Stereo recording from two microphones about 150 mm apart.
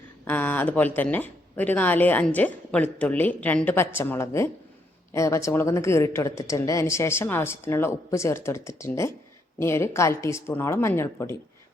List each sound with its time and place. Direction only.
0.3 s a woman's voice: 10° left (ahead or behind)